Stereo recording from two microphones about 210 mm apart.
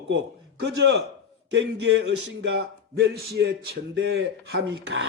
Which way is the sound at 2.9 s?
55° right (ahead or behind).